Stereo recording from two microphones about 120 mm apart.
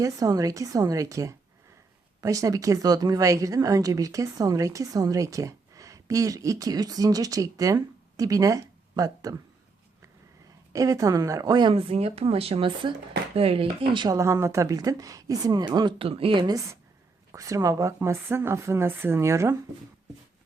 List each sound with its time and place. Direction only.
0.0 s a woman's voice: 30° right (ahead or behind)
10.7 s a woman's voice: 30° right (ahead or behind)
11.7 s speech: 55° right (ahead or behind)
14.1 s a woman's voice: 25° right (ahead or behind); by 16.6 s 40° right (ahead or behind)
17.3 s a woman's voice: 25° right (ahead or behind)